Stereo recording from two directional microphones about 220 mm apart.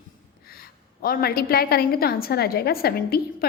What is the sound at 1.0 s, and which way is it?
A woman's voice, 45° left (ahead or behind).